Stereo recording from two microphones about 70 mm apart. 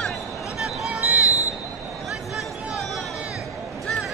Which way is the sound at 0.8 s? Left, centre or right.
Centre.